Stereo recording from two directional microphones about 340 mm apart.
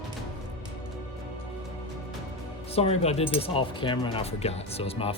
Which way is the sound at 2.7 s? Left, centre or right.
Centre.